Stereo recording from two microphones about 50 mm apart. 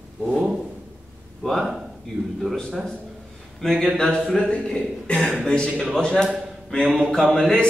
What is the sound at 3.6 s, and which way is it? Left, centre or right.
Speech, centre.